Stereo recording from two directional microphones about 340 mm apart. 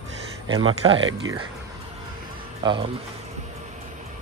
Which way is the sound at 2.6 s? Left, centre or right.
Centre.